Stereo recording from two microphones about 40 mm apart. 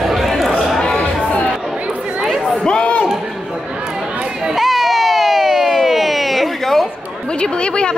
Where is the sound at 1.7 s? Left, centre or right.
Right.